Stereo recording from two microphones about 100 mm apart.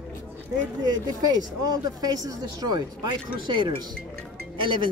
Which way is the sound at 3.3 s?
55° right (ahead or behind).